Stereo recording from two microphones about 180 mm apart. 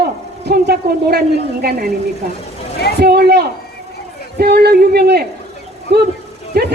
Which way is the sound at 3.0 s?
65° right (ahead or behind).